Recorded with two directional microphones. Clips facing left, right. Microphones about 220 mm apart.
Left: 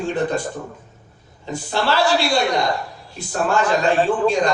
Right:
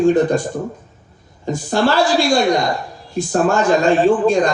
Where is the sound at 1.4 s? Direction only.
45° right (ahead or behind).